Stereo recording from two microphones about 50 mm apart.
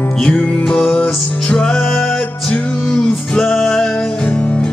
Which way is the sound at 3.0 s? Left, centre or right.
Centre.